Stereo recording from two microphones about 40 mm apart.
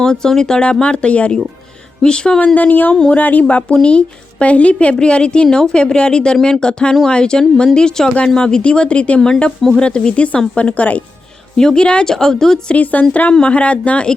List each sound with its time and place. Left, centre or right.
0.0 s speech: centre
0.6 s a woman's voice: left
2.6 s speech: left
3.4 s a woman's voice: left
11.5 s a woman's voice: centre
12.7 s speech: left